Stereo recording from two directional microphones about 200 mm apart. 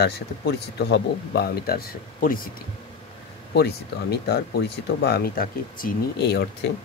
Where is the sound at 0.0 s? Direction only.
55° left (ahead or behind).